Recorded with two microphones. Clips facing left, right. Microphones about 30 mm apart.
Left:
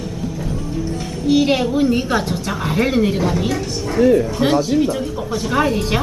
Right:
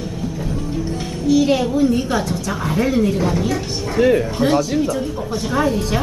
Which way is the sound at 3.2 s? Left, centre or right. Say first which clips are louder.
Even; centre.